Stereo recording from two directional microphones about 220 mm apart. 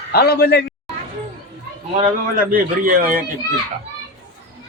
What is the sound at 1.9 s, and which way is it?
A man's voice, 40° right (ahead or behind).